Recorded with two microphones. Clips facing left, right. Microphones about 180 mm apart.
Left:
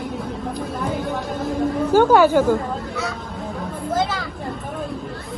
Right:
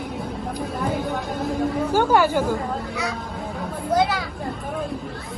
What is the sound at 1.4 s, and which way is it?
Chatter, 10° right (ahead or behind).